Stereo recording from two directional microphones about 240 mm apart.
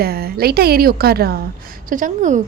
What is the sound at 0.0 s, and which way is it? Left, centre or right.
A woman's voice, right.